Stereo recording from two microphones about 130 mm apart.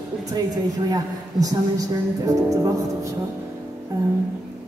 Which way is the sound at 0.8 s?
30° right (ahead or behind).